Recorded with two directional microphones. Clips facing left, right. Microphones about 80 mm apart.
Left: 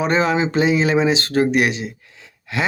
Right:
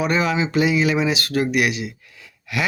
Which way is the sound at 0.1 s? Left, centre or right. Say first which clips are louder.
Left 3 dB; left.